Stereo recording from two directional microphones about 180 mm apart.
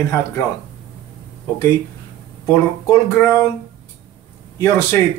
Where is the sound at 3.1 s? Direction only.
15° left (ahead or behind).